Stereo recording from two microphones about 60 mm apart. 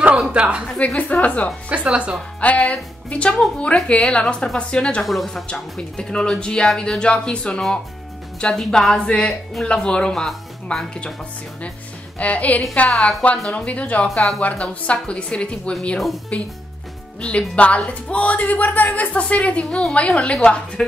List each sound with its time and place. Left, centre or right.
0.1 s a woman's voice: centre
0.7 s speech: left
1.7 s speech: centre
2.4 s speech: left
5.0 s speech: centre
5.5 s speech: centre
12.2 s speech: left